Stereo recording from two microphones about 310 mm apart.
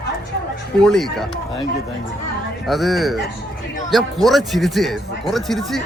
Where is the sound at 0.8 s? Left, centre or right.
Centre.